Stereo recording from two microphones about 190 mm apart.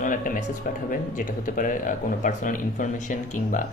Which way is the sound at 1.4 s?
45° left (ahead or behind).